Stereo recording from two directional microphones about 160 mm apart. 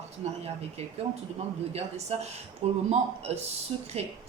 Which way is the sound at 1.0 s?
40° right (ahead or behind).